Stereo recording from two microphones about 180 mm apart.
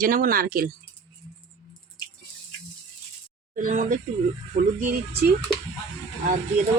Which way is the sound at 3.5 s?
50° right (ahead or behind).